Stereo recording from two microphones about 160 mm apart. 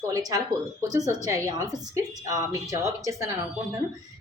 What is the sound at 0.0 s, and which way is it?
A woman's voice, 20° right (ahead or behind).